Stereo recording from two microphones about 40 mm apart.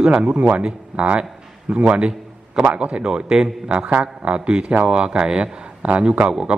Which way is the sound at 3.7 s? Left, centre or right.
Right.